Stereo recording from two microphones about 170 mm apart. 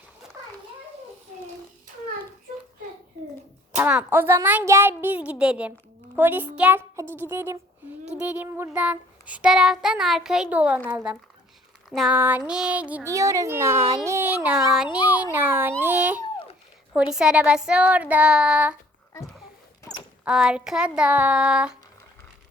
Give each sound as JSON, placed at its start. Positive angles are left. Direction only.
{"t": 3.8, "sound": "child singing", "side_deg": -10}
{"t": 13.1, "sound": "child singing", "side_deg": -20}
{"t": 14.3, "sound": "speech", "side_deg": -5}
{"t": 15.0, "sound": "child singing", "side_deg": -10}
{"t": 16.9, "sound": "speech", "side_deg": -5}
{"t": 20.2, "sound": "speech", "side_deg": -5}